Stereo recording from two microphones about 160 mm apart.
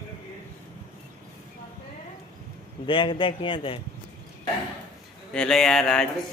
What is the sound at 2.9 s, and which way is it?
Speech, 30° left (ahead or behind).